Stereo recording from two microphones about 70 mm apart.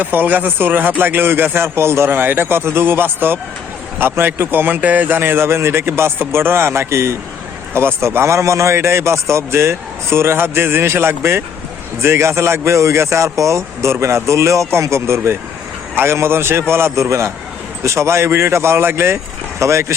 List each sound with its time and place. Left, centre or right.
0.0 s speech: right